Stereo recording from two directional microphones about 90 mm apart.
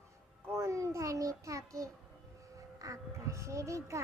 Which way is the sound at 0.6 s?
35° right (ahead or behind).